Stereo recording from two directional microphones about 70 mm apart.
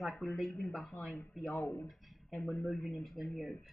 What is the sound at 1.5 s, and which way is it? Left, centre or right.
Speech, left.